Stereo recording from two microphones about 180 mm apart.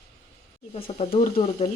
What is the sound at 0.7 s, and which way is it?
Speech, 30° left (ahead or behind).